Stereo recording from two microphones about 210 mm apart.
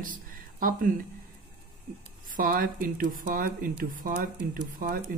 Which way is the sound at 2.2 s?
40° right (ahead or behind).